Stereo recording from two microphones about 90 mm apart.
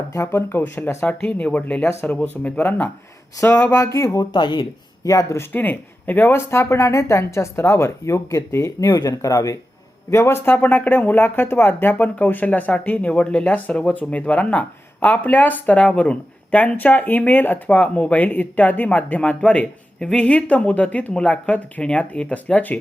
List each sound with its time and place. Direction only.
0.1 s speech: 30° left (ahead or behind)
3.3 s speech: 35° left (ahead or behind)
4.2 s speech: 55° left (ahead or behind)
5.0 s speech: 35° left (ahead or behind)
5.5 s speech: 20° left (ahead or behind); by 9.6 s 40° left (ahead or behind)
10.1 s speech: 30° left (ahead or behind)